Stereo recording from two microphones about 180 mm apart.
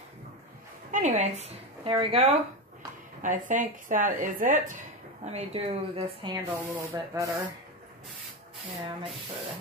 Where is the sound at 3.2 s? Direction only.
45° right (ahead or behind).